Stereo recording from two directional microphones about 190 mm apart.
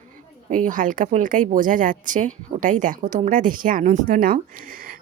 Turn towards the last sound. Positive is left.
turn(degrees=-50)  # may be behind; listen again after turning